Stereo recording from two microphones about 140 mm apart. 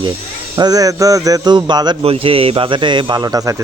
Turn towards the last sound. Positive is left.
turn(degrees=-25)  # may be behind; listen again after turning